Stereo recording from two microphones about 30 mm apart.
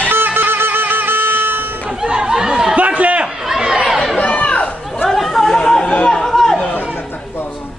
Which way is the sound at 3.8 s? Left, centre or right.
Centre.